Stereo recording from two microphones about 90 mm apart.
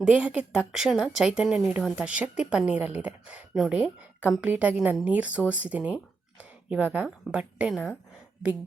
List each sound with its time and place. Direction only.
0.0 s a woman's voice: 10° right (ahead or behind)